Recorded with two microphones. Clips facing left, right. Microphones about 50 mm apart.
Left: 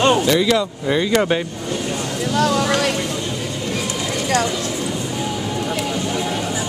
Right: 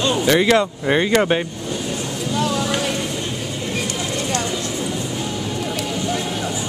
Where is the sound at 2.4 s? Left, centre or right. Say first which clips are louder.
Left 4 dB; left.